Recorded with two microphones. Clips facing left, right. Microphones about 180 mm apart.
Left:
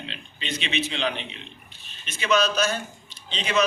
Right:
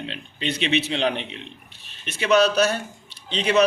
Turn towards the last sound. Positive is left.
turn(degrees=-60)  # may be behind; listen again after turning